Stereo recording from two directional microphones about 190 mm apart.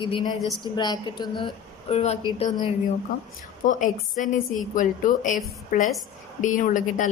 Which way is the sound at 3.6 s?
45° left (ahead or behind).